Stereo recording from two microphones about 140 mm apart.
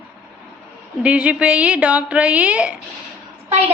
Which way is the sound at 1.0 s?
10° right (ahead or behind).